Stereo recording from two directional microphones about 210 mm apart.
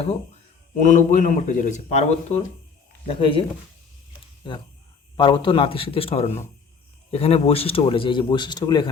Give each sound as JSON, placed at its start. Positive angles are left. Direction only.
{"t": 0.8, "sound": "speech", "side_deg": 40}
{"t": 4.4, "sound": "speech", "side_deg": 20}